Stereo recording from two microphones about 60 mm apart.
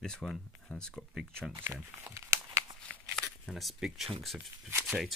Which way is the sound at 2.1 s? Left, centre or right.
Right.